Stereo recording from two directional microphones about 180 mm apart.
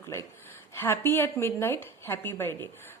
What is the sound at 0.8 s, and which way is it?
A woman's voice, 15° left (ahead or behind).